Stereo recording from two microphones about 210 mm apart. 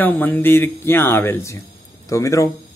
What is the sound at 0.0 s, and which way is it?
Speech, 10° left (ahead or behind).